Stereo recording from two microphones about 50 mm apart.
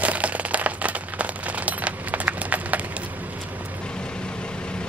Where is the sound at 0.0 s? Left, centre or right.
Right.